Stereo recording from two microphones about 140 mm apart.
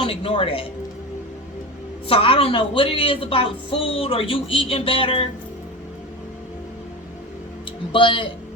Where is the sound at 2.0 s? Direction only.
40° left (ahead or behind).